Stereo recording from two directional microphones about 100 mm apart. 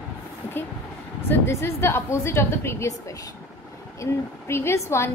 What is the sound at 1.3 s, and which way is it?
A woman's voice, 25° left (ahead or behind).